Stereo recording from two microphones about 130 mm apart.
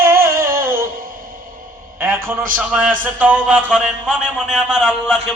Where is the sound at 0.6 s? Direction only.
90° right.